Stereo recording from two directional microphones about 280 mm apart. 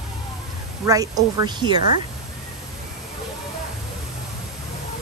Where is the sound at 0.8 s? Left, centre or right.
Centre.